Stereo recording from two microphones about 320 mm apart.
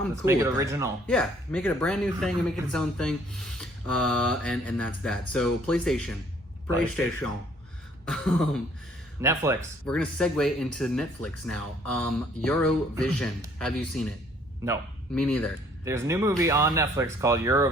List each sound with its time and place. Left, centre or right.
0.3 s speech: centre
1.0 s speech: centre
9.2 s speech: centre
9.8 s speech: centre
15.1 s speech: centre
15.8 s speech: centre